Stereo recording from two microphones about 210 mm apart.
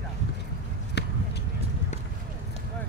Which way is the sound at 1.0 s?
55° left (ahead or behind).